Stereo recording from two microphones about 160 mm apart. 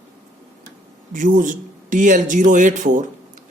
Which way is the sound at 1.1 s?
55° right (ahead or behind).